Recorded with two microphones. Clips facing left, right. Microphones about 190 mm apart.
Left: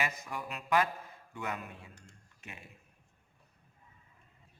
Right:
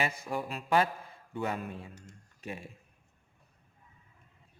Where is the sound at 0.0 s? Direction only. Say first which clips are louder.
Right 4 dB; 30° right (ahead or behind).